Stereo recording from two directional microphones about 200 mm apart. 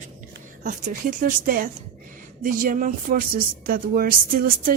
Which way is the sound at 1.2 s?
45° right (ahead or behind).